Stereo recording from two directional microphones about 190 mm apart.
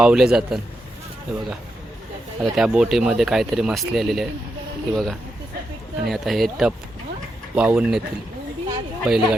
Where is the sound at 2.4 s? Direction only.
Centre (ahead or behind).